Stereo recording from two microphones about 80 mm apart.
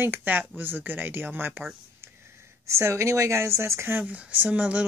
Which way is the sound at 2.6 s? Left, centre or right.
Right.